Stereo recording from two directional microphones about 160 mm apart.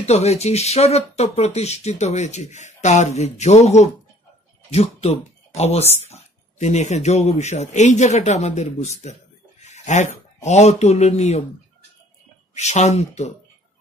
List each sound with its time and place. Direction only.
0.0 s speech: 40° left (ahead or behind)
12.5 s speech: 45° left (ahead or behind)